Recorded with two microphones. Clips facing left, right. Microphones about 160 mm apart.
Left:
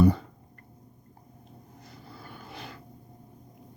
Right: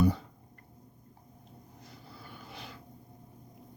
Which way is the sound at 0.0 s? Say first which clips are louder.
Left 5 dB; 60° left (ahead or behind).